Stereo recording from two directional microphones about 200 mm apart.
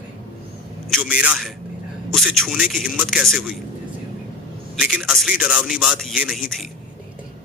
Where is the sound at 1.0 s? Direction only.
5° right (ahead or behind).